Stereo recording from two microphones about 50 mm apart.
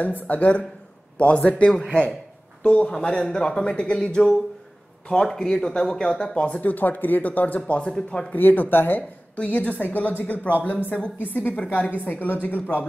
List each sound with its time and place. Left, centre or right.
0.0 s a woman's voice: left
7.8 s speech: centre
8.4 s a woman's voice: left